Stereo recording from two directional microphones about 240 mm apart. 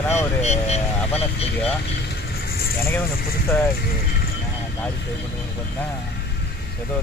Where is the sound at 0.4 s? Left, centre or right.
Left.